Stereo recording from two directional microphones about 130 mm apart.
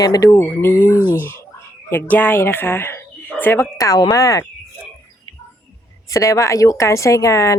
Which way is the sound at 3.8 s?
30° left (ahead or behind).